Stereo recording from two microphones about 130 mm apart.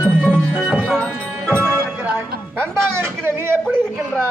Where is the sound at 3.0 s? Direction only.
20° right (ahead or behind).